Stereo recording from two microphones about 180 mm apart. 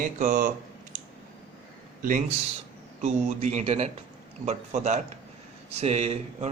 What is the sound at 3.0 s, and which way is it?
Speech, 40° right (ahead or behind).